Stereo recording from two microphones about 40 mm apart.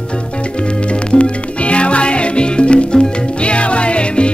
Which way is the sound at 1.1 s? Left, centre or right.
Left.